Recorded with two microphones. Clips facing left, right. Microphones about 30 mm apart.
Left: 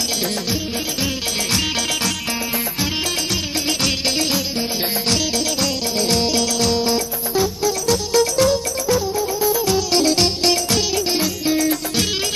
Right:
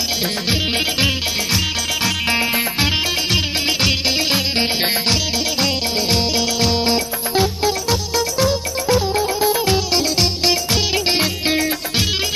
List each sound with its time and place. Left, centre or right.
2.3 s music: right
5.1 s music: right
8.1 s music: centre
9.1 s music: right
9.9 s music: centre
11.1 s music: right